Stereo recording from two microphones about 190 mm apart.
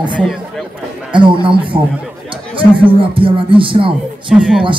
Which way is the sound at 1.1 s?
25° right (ahead or behind).